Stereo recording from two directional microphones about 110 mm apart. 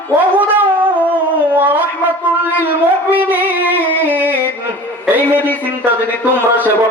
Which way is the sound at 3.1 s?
15° right (ahead or behind).